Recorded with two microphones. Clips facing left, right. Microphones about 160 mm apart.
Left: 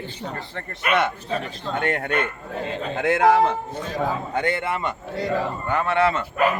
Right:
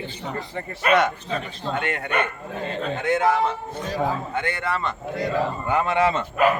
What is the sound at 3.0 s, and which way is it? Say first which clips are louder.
Speech: left 3 dB; 90° left.